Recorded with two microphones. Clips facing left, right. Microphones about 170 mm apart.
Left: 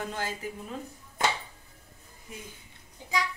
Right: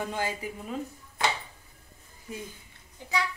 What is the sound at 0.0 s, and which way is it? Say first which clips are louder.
Speech: right 3 dB; 15° right (ahead or behind).